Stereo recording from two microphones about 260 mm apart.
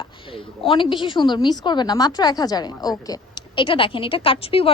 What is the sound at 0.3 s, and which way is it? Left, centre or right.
A woman's voice, centre.